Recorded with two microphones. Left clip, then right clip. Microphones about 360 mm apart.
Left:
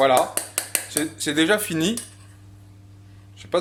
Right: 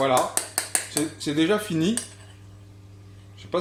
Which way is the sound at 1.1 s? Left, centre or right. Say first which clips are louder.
Left 4 dB; left.